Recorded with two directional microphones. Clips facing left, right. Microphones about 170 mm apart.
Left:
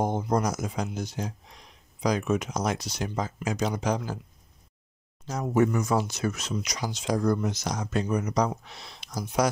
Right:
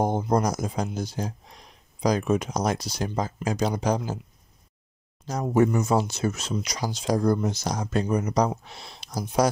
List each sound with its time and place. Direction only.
0.0 s speech: 35° right (ahead or behind)
5.2 s speech: 35° right (ahead or behind)